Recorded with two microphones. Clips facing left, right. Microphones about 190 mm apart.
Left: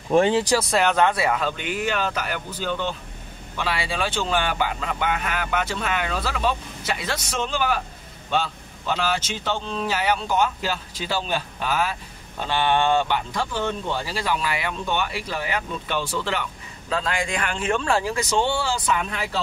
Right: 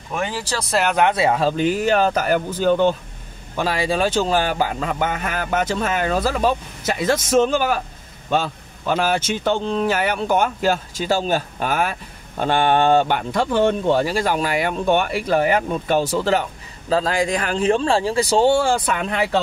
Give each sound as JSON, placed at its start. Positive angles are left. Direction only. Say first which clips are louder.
{"t": 0.1, "sound": "speech", "louder": "left 8 dB", "side_deg": 30}
{"t": 0.6, "sound": "speech", "louder": "even", "side_deg": 0}
{"t": 0.9, "sound": "speech", "louder": "right 3 dB", "side_deg": -20}
{"t": 13.2, "sound": "speech", "louder": "right 8 dB", "side_deg": -60}